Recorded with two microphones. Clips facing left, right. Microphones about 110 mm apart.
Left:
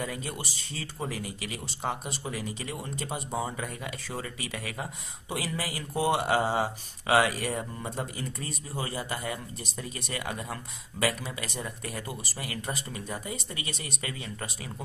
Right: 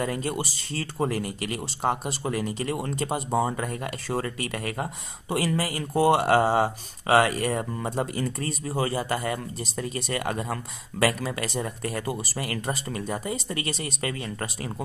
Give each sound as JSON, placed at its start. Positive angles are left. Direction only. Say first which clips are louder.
{"t": 0.0, "sound": "speech", "louder": "right 7 dB", "side_deg": -60}
{"t": 0.9, "sound": "speech", "louder": "right 8 dB", "side_deg": -55}
{"t": 3.3, "sound": "speech", "louder": "right 8 dB", "side_deg": -55}